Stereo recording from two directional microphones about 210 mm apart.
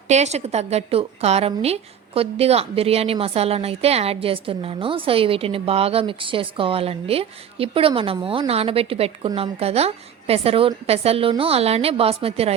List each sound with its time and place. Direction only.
0.1 s a woman's voice: 30° right (ahead or behind)